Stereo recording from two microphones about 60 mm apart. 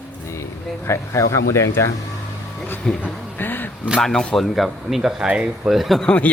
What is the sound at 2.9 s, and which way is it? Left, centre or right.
Speech, centre.